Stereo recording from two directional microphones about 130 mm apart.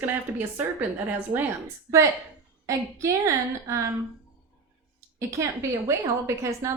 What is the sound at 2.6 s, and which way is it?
A woman's voice, 25° right (ahead or behind).